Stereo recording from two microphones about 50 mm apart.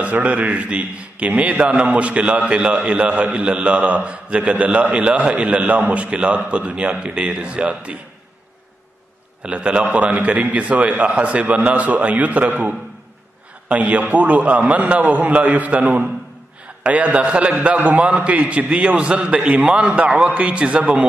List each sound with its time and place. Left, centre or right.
0.0 s a man's voice: right
9.4 s a man's voice: right